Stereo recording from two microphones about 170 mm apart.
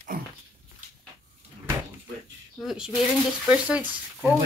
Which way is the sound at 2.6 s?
5° right (ahead or behind).